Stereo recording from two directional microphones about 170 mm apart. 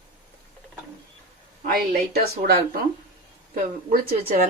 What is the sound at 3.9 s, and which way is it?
Speech, 55° right (ahead or behind).